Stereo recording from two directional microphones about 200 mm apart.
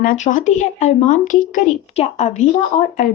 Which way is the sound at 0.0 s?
40° left (ahead or behind).